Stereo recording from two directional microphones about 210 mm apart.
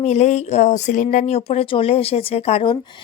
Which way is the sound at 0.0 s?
30° left (ahead or behind).